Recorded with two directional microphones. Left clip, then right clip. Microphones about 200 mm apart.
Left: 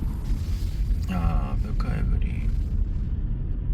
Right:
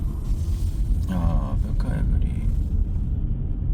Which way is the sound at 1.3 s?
5° left (ahead or behind).